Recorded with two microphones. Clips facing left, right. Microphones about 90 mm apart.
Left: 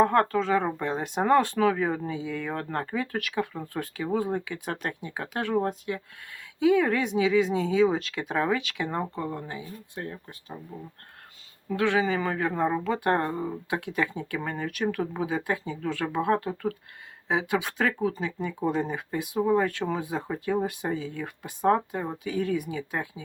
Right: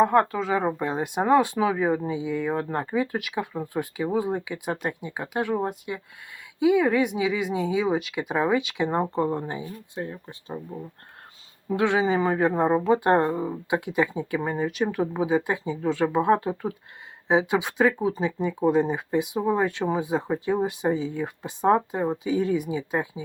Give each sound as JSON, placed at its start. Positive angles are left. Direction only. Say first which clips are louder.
{"t": 0.0, "sound": "speech", "louder": "right 2 dB", "side_deg": -10}
{"t": 11.7, "sound": "speech", "louder": "right 3 dB", "side_deg": -20}